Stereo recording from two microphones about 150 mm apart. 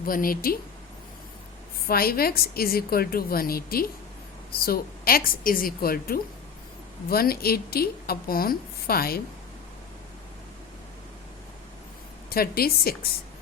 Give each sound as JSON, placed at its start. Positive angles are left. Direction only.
{"t": 0.0, "sound": "speech", "side_deg": 70}
{"t": 1.9, "sound": "a woman's voice", "side_deg": 90}
{"t": 12.3, "sound": "a woman's voice", "side_deg": 90}